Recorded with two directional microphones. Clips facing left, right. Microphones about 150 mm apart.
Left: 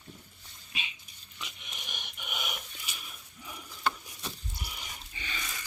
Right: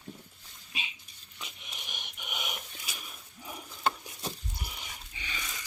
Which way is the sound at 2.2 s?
25° right (ahead or behind).